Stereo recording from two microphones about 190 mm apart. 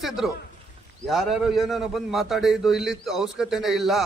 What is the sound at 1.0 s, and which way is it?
A man's voice, centre (ahead or behind).